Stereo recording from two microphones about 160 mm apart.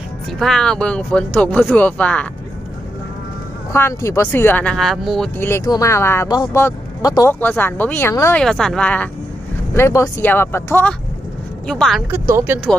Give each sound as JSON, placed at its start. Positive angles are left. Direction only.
{"t": 0.3, "sound": "speech", "side_deg": 5}
{"t": 3.7, "sound": "speech", "side_deg": 15}
{"t": 5.4, "sound": "speech", "side_deg": 15}
{"t": 8.4, "sound": "speech", "side_deg": 5}
{"t": 11.6, "sound": "speech", "side_deg": 5}
{"t": 12.1, "sound": "speech", "side_deg": -15}